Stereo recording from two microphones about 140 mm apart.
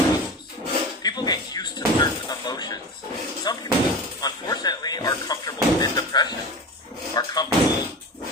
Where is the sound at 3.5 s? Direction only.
30° left (ahead or behind).